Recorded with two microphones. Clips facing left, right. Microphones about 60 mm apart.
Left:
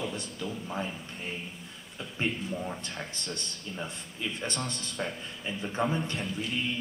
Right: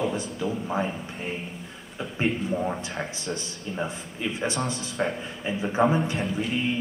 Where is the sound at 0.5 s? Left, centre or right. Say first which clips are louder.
Right 7 dB; right; by 5.0 s centre.